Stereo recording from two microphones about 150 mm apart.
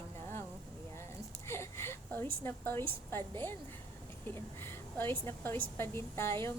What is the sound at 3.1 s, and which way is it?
A woman's voice, 15° left (ahead or behind).